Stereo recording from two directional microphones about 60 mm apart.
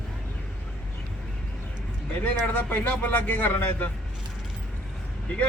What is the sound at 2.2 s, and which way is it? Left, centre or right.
Speech, left.